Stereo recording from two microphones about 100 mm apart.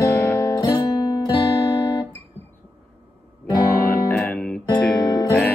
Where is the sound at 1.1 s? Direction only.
50° left (ahead or behind).